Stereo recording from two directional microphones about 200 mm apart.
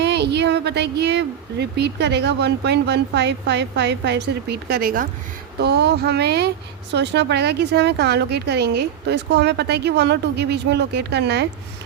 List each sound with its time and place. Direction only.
0.0 s speech: 55° right (ahead or behind)